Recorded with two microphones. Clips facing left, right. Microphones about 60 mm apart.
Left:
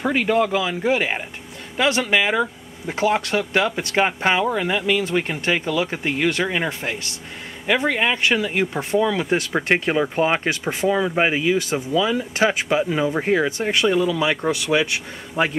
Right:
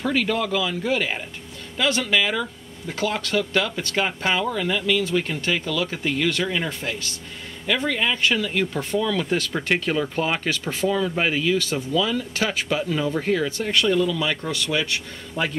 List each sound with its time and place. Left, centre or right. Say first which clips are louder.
0.0 s speech: left 4 dB; left
13.5 s speech: left 2 dB; centre